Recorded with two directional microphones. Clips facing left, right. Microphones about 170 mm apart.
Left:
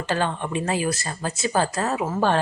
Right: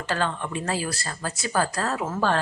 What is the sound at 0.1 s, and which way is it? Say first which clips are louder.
Speech: left 2 dB; 20° left (ahead or behind).